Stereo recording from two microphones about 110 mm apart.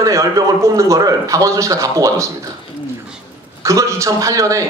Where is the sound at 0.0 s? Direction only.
30° right (ahead or behind).